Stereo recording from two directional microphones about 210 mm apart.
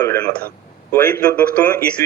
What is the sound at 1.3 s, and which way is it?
Speech, 5° left (ahead or behind).